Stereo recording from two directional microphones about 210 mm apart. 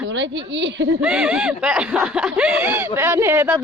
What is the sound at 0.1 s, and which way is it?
Speech, 60° right (ahead or behind).